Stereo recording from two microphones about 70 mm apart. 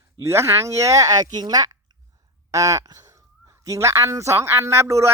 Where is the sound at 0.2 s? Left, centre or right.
Right.